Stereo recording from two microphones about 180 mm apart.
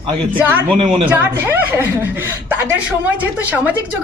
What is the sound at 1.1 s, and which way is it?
A woman's voice, 10° right (ahead or behind).